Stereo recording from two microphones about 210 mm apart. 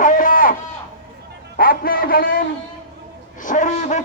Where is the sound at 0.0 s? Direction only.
40° left (ahead or behind).